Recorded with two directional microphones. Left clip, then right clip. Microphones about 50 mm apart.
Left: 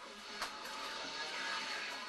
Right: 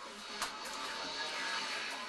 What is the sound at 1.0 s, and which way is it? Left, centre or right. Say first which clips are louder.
Music: right 3 dB; left.